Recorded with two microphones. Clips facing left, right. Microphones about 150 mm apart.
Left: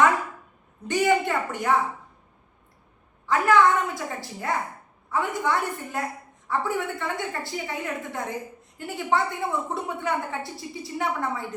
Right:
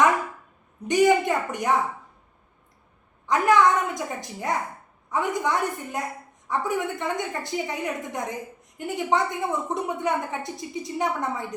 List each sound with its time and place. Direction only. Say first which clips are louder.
0.9 s a woman's voice: right 3 dB; 15° right (ahead or behind)
3.2 s a woman's voice: even; 20° right (ahead or behind)